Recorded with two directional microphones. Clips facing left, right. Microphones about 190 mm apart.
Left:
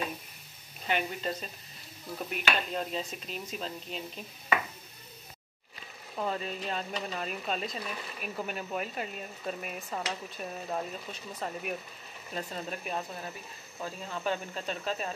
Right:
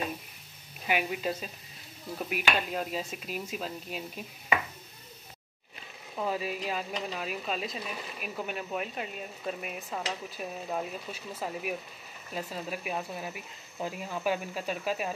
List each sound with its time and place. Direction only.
0.8 s speech: 5° right (ahead or behind)
6.1 s speech: 5° right (ahead or behind)